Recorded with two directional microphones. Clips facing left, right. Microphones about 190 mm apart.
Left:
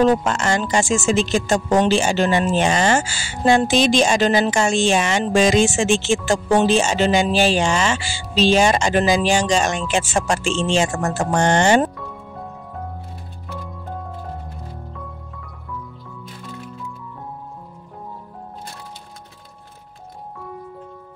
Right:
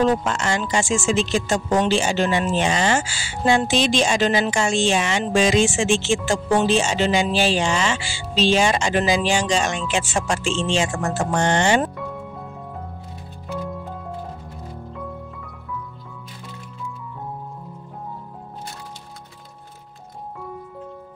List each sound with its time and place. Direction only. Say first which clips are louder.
0.2 s speech: left 3 dB; 45° left (ahead or behind)